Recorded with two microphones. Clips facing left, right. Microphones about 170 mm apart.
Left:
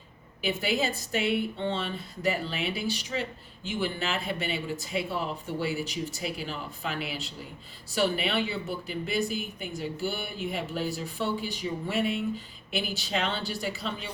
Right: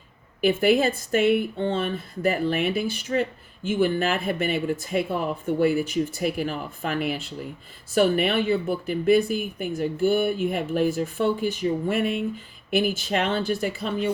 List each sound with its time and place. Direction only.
0.4 s speech: 55° right (ahead or behind)